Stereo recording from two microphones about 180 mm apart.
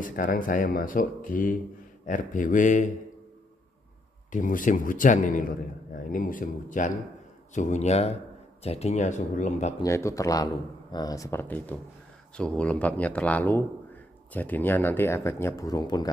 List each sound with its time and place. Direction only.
0.0 s speech: 50° left (ahead or behind)
4.3 s speech: 45° left (ahead or behind)
9.8 s speech: 15° left (ahead or behind)